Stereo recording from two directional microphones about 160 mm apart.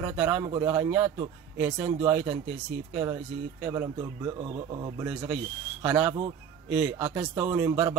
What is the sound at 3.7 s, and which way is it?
Speech, 20° right (ahead or behind).